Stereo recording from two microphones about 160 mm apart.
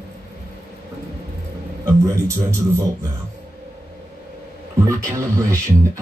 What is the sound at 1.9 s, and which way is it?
Speech, 20° right (ahead or behind).